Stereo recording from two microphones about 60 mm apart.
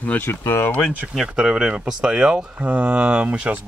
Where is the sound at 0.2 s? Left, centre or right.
Left.